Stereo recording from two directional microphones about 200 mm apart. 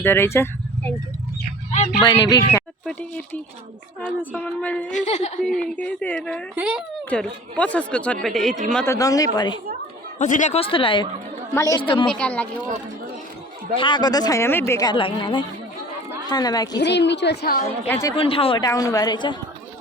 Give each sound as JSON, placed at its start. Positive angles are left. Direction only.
{"t": 0.0, "sound": "speech", "side_deg": 10}
{"t": 2.0, "sound": "speech", "side_deg": 20}
{"t": 4.0, "sound": "speech", "side_deg": 10}
{"t": 4.9, "sound": "a woman's voice", "side_deg": 35}
{"t": 5.4, "sound": "speech", "side_deg": 0}
{"t": 6.6, "sound": "speech", "side_deg": -5}
{"t": 7.1, "sound": "speech", "side_deg": 5}
{"t": 10.2, "sound": "speech", "side_deg": 40}
{"t": 12.1, "sound": "speech", "side_deg": 5}
{"t": 13.7, "sound": "speech", "side_deg": 25}
{"t": 16.7, "sound": "a woman's voice", "side_deg": 60}
{"t": 17.8, "sound": "speech", "side_deg": 10}
{"t": 18.2, "sound": "speech", "side_deg": 30}